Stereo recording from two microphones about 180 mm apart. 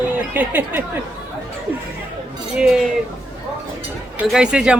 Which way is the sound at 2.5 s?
5° right (ahead or behind).